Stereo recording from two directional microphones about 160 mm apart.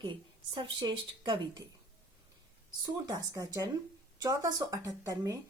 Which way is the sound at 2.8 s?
25° right (ahead or behind).